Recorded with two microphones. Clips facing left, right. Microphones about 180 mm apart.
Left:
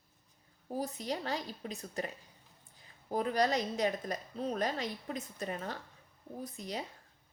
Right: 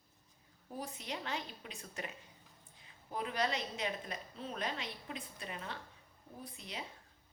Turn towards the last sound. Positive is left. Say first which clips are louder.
# left 7 dB
turn(degrees=40)  # may be behind; listen again after turning